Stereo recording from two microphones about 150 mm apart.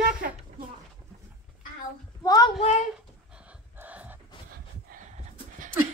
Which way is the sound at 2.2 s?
25° left (ahead or behind).